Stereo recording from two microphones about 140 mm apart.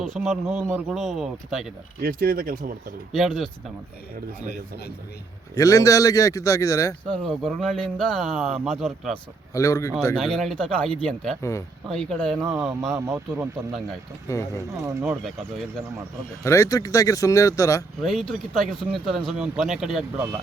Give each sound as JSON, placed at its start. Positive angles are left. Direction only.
{"t": 0.0, "sound": "speech", "side_deg": 0}
{"t": 2.0, "sound": "speech", "side_deg": -90}
{"t": 3.1, "sound": "speech", "side_deg": 0}
{"t": 5.5, "sound": "speech", "side_deg": 25}
{"t": 7.1, "sound": "speech", "side_deg": 5}
{"t": 9.5, "sound": "speech", "side_deg": 25}
{"t": 10.2, "sound": "speech", "side_deg": 0}
{"t": 13.1, "sound": "speech", "side_deg": -15}
{"t": 14.3, "sound": "speech", "side_deg": 20}
{"t": 14.7, "sound": "speech", "side_deg": -20}
{"t": 15.2, "sound": "speech", "side_deg": 5}
{"t": 16.4, "sound": "speech", "side_deg": 20}
{"t": 18.0, "sound": "speech", "side_deg": 0}